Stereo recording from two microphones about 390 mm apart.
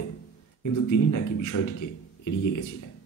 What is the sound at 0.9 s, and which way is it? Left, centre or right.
A man's voice, left.